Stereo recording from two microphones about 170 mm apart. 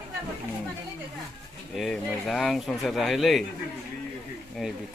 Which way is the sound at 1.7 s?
Centre (ahead or behind).